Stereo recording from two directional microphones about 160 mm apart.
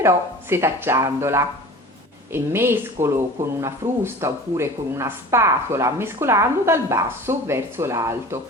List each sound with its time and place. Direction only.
0.0 s speech: 15° right (ahead or behind)